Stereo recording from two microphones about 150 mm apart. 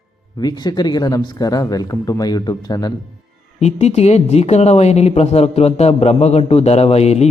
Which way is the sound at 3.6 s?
45° left (ahead or behind).